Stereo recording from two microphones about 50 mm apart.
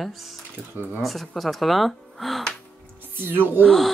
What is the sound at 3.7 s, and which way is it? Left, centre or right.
Speech, centre.